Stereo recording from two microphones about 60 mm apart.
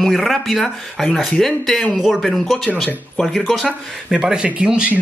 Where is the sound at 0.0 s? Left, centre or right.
Centre.